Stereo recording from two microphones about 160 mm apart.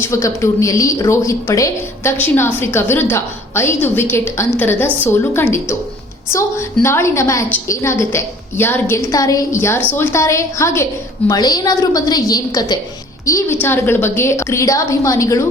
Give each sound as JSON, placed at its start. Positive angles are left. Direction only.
{"t": 0.0, "sound": "a woman's voice", "side_deg": 15}